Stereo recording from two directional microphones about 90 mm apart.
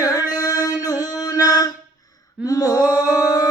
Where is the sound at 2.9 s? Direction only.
40° left (ahead or behind).